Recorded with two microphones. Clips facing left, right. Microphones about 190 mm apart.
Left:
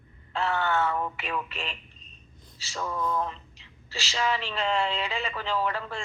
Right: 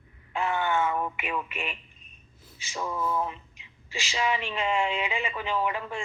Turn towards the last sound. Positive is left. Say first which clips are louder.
# even
turn(degrees=-15)  # may be behind; listen again after turning